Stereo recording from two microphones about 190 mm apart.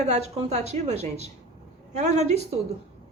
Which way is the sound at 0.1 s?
35° right (ahead or behind).